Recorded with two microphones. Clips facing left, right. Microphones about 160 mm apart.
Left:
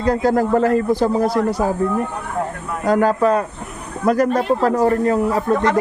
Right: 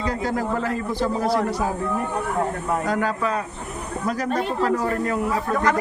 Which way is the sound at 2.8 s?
40° left (ahead or behind).